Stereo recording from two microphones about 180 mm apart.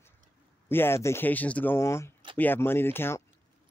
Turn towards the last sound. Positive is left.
turn(degrees=15)  # may be behind; listen again after turning